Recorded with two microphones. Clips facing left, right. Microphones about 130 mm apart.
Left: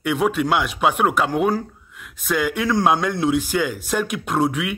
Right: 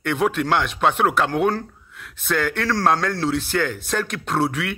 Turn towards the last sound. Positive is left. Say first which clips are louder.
# left 2 dB
turn(degrees=0)  # may be behind; listen again after turning